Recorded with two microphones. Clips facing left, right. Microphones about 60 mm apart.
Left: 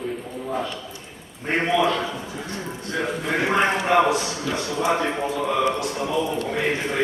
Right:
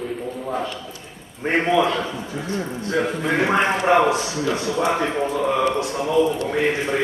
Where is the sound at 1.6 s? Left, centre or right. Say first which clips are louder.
Right 3 dB; centre.